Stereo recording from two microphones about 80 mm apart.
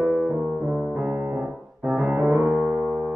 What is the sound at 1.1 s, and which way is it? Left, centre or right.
Piano, right.